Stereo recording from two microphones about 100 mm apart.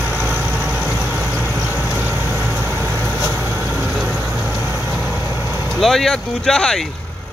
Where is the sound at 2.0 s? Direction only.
15° right (ahead or behind).